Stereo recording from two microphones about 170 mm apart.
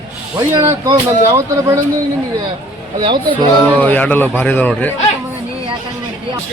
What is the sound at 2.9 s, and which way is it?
Speech, 25° right (ahead or behind).